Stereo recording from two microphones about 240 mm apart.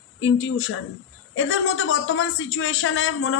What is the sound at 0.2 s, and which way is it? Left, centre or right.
Speech, left.